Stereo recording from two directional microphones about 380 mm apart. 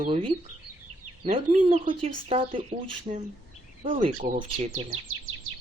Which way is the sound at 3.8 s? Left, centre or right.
Centre.